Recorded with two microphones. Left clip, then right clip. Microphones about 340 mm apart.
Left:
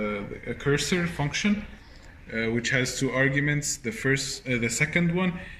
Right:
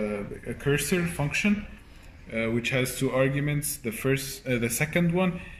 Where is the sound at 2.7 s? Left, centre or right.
Centre.